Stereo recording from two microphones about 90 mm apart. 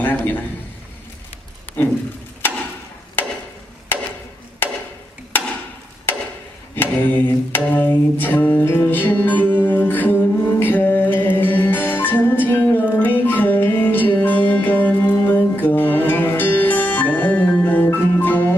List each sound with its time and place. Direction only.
0.0 s a man's voice: 20° left (ahead or behind)
2.4 s a sound: 20° left (ahead or behind)
3.9 s chop: 20° left (ahead or behind)
6.7 s music: 20° left (ahead or behind)